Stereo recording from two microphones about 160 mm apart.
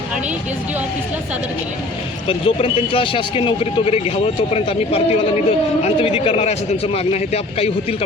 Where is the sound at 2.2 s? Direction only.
35° left (ahead or behind).